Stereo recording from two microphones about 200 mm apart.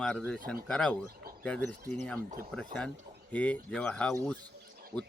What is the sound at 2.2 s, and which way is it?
Speech, 40° right (ahead or behind).